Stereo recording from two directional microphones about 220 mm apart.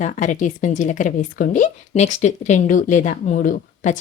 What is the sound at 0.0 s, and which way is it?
Speech, 35° left (ahead or behind).